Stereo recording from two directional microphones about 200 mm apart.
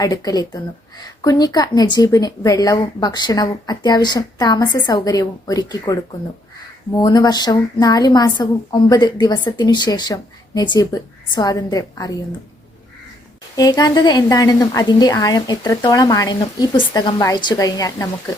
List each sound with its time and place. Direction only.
0.0 s a woman's voice: 20° left (ahead or behind)
13.6 s a woman's voice: 20° left (ahead or behind)